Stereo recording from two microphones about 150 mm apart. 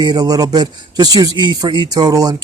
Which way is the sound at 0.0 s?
30° right (ahead or behind).